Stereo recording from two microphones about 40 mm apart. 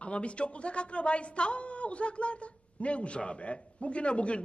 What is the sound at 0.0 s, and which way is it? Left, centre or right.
Speech, left.